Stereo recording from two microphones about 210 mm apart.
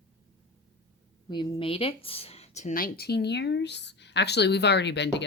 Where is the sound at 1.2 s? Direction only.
20° left (ahead or behind).